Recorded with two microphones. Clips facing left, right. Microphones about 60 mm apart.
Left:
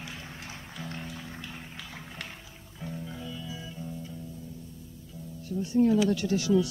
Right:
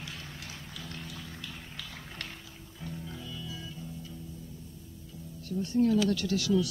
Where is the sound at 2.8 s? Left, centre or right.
Centre.